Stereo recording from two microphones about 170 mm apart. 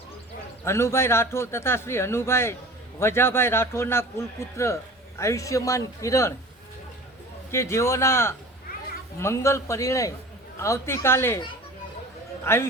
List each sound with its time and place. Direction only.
0.6 s a man's voice: 15° left (ahead or behind)
7.5 s a man's voice: 15° left (ahead or behind)
12.5 s a man's voice: 15° left (ahead or behind)